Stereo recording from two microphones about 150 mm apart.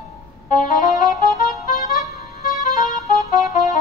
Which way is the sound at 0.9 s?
20° right (ahead or behind).